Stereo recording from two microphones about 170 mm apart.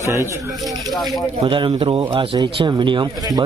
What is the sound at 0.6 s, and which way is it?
Speech, centre (ahead or behind).